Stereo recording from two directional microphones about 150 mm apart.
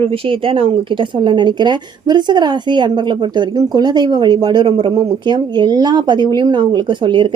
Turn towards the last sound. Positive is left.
turn(degrees=-35)  # may be behind; listen again after turning